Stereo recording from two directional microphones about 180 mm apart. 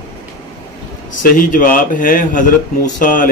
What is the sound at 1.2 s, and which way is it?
Speech, 50° left (ahead or behind).